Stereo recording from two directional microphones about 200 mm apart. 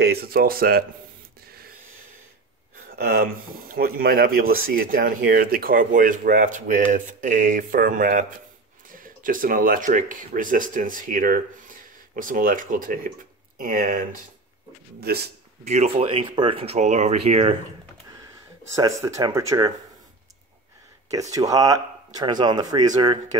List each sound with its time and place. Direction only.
0.0 s speech: 50° right (ahead or behind)
3.0 s speech: 50° right (ahead or behind)
15.6 s speech: 30° right (ahead or behind)
18.8 s speech: 15° right (ahead or behind)
21.1 s speech: 15° right (ahead or behind)